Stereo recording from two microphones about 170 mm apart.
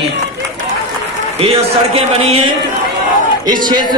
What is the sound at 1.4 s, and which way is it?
A man's voice, 35° right (ahead or behind).